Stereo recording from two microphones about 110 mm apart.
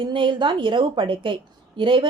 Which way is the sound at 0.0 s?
45° right (ahead or behind).